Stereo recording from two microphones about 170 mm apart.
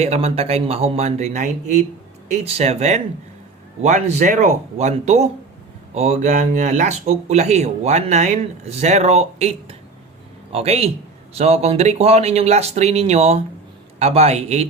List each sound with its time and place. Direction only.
0.0 s speech: 40° right (ahead or behind)